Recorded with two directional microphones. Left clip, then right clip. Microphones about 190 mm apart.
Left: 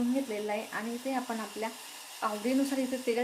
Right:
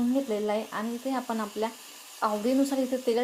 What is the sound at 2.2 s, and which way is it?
Speech, 25° right (ahead or behind).